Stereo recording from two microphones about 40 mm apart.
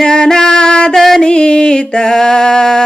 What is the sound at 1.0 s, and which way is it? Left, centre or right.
Music, centre.